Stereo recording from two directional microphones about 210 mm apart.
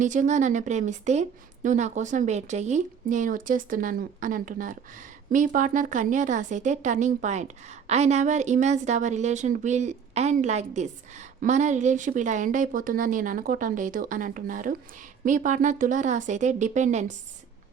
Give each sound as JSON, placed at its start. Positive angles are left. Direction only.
{"t": 0.0, "sound": "a woman's voice", "side_deg": -35}